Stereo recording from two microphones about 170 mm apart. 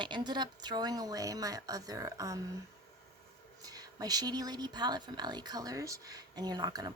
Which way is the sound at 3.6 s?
20° right (ahead or behind).